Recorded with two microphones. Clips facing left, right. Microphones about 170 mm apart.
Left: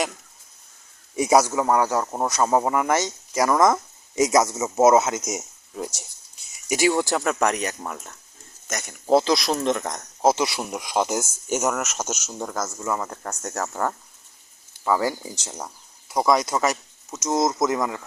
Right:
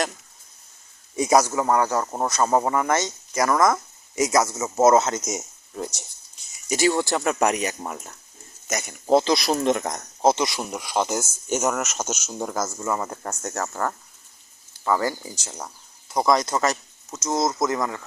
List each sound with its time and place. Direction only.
1.1 s a man's voice: 10° left (ahead or behind)
7.3 s speech: 10° right (ahead or behind)
10.2 s speech: 5° left (ahead or behind)